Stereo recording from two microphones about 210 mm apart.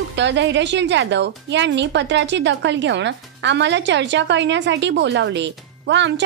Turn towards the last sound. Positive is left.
turn(degrees=-55)  # may be behind; listen again after turning